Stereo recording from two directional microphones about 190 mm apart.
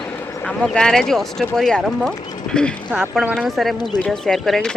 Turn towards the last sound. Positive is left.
turn(degrees=0)  # may be behind; listen again after turning